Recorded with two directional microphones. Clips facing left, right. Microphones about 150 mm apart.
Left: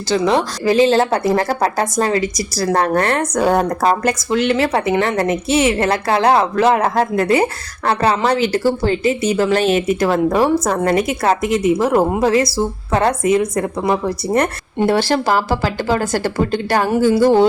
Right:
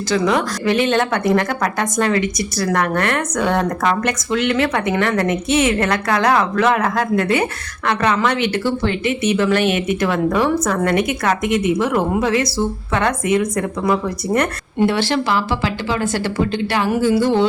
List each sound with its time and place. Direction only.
0.1 s a woman's voice: 30° left (ahead or behind)